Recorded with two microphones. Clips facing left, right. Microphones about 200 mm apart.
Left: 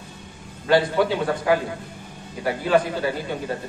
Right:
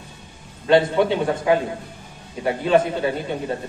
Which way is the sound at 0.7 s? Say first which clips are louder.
Right 2 dB; 25° right (ahead or behind).